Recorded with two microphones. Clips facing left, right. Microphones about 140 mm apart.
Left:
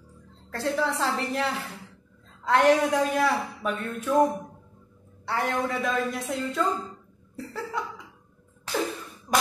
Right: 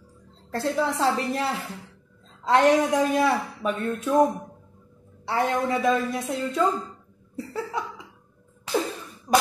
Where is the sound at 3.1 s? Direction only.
25° right (ahead or behind).